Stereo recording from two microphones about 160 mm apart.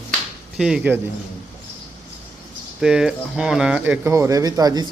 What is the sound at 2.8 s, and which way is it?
Speech, 5° right (ahead or behind).